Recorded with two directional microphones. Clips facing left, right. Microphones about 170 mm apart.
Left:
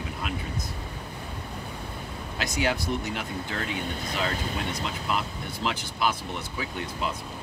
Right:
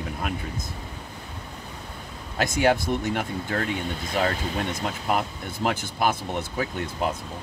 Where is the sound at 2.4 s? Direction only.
50° right (ahead or behind).